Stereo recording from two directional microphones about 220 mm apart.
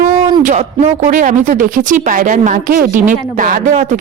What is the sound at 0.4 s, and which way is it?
Speech, 35° right (ahead or behind).